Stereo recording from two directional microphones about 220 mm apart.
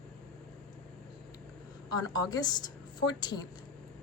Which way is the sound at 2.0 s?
20° left (ahead or behind).